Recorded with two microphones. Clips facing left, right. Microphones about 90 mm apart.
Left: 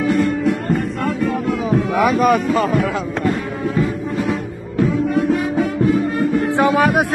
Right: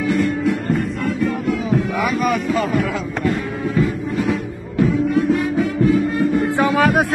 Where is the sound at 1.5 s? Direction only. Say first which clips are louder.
Left 2 dB; 45° left (ahead or behind).